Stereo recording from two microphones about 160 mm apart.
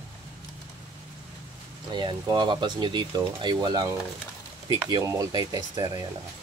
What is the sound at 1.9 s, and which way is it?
Speech, 25° right (ahead or behind).